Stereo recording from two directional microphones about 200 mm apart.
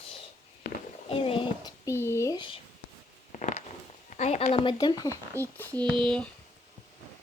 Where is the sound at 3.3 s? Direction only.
40° left (ahead or behind).